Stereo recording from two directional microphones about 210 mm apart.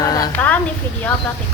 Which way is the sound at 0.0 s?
15° left (ahead or behind).